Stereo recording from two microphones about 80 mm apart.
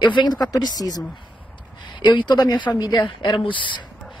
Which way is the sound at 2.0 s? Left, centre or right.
Left.